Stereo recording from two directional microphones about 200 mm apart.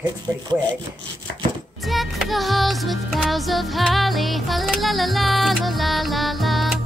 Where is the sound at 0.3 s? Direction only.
10° right (ahead or behind).